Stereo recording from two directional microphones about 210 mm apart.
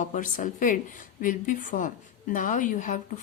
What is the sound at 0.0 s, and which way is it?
Speech, 35° left (ahead or behind).